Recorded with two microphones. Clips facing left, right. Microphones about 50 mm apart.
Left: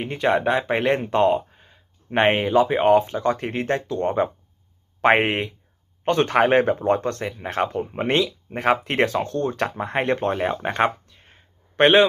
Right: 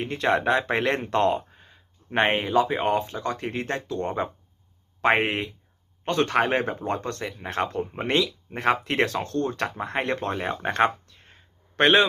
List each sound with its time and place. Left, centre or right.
0.0 s speech: centre; by 7.3 s left
7.3 s speech: centre
10.3 s a sound: centre